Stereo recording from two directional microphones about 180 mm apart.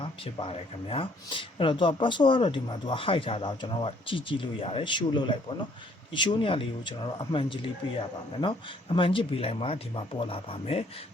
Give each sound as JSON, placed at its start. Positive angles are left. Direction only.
{"t": 0.0, "sound": "speech", "side_deg": 25}